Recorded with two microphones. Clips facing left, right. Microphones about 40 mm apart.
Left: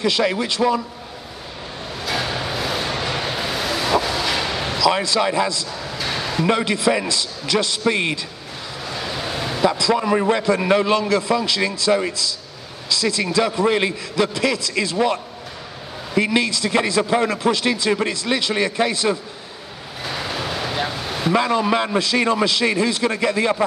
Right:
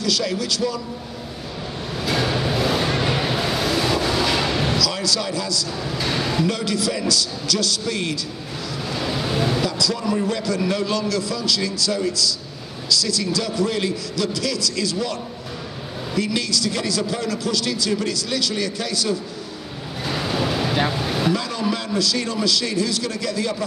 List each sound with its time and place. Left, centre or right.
0.0 s a man's voice: left
2.0 s vehicle: centre
4.7 s a man's voice: left
5.9 s a sound: centre
6.4 s a man's voice: left
8.8 s vehicle: centre
9.7 s a man's voice: left
16.2 s a man's voice: left
20.1 s waves: centre
21.3 s a man's voice: left